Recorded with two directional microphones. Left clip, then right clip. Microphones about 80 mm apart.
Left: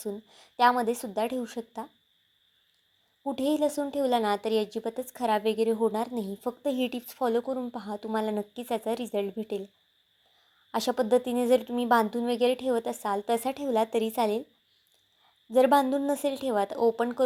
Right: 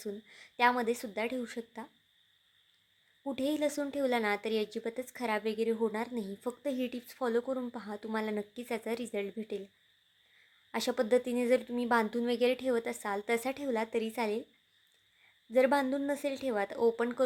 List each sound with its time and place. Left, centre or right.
0.3 s a woman's voice: centre
3.2 s a woman's voice: left
3.7 s a woman's voice: centre
6.7 s a woman's voice: left
7.3 s a woman's voice: left
10.7 s a woman's voice: left
12.1 s a woman's voice: centre
13.7 s a woman's voice: left
15.5 s a woman's voice: left